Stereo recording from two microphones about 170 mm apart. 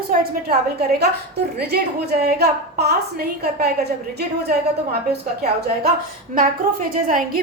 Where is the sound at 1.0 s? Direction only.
70° right (ahead or behind).